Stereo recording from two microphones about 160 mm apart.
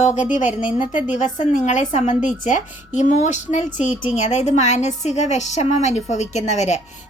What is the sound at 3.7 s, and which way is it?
Speech, 10° right (ahead or behind).